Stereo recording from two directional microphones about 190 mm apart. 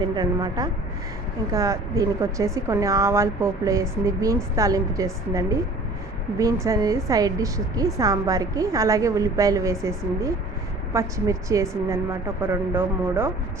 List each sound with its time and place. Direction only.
0.0 s a woman's voice: 20° right (ahead or behind)
6.7 s a woman's voice: 15° right (ahead or behind)